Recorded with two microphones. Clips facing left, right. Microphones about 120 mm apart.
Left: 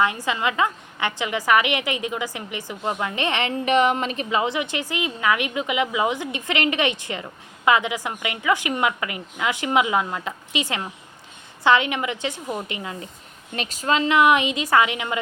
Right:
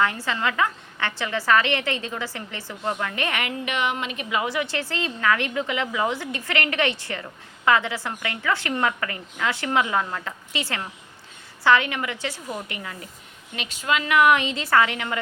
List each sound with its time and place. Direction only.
0.0 s a woman's voice: 15° left (ahead or behind)
13.6 s a woman's voice: 40° left (ahead or behind); by 15.2 s 15° left (ahead or behind)